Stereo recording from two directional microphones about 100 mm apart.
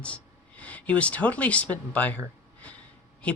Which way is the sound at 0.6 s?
15° left (ahead or behind).